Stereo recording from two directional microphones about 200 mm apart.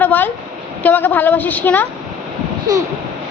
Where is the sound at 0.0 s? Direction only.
10° left (ahead or behind).